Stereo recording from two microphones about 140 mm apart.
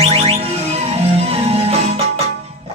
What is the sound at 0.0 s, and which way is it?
Music, 45° right (ahead or behind).